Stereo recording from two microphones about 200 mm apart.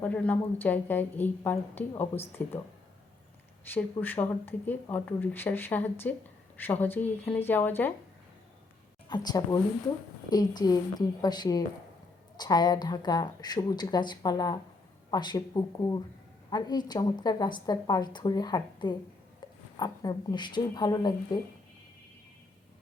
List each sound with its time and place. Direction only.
0.0 s speech: 10° left (ahead or behind)
3.7 s speech: 10° left (ahead or behind)
9.0 s a woman's voice: 20° left (ahead or behind)